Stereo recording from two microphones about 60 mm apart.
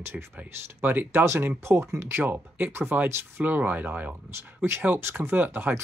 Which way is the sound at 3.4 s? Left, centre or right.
Right.